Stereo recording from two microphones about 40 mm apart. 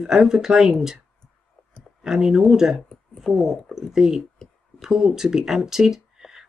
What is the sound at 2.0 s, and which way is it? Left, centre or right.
Speech, centre.